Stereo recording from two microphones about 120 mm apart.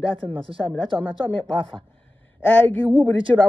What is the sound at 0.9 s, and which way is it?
Speech, 10° left (ahead or behind).